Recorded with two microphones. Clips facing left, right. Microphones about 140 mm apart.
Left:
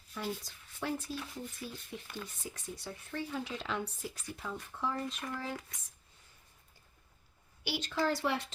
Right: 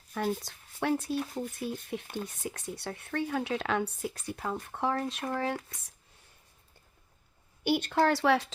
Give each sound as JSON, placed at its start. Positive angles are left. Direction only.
{"t": 0.1, "sound": "speech", "side_deg": -50}
{"t": 0.4, "sound": "speech", "side_deg": -70}
{"t": 7.6, "sound": "speech", "side_deg": -55}